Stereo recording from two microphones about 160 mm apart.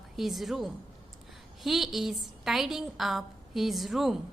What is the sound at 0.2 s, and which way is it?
A woman's voice, centre (ahead or behind).